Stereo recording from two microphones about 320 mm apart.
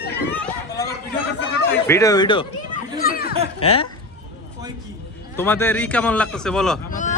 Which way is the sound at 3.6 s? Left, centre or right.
Centre.